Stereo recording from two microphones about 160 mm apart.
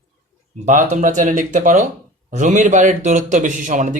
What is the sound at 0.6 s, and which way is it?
A man's voice, 50° right (ahead or behind).